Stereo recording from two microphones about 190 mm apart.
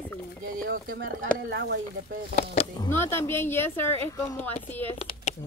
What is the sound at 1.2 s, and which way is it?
Speech, 60° right (ahead or behind).